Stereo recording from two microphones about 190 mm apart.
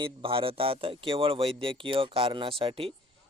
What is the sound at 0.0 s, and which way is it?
A man's voice, 30° right (ahead or behind).